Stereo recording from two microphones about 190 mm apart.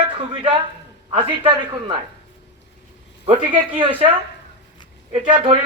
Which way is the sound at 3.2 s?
25° right (ahead or behind).